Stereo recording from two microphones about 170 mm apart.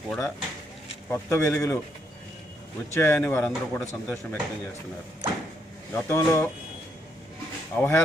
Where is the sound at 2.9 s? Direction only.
15° left (ahead or behind).